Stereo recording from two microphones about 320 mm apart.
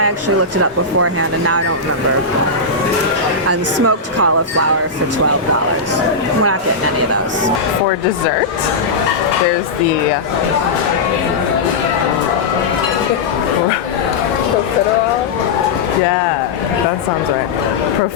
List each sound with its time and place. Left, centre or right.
0.6 s speech: right
3.8 s speech: right